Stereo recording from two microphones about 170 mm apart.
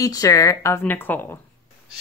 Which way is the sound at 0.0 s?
20° left (ahead or behind).